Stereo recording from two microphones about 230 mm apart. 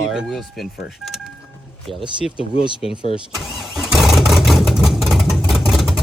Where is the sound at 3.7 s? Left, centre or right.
Centre.